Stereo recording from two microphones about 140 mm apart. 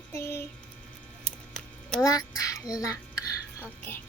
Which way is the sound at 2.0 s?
25° left (ahead or behind).